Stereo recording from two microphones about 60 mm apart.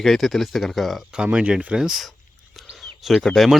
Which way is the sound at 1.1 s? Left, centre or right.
Centre.